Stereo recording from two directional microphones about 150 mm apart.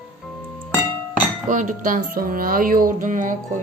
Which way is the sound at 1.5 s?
60° right (ahead or behind).